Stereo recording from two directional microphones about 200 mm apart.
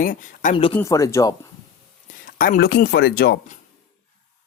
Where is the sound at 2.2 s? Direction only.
45° left (ahead or behind).